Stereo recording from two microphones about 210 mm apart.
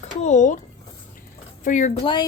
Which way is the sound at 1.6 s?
35° left (ahead or behind).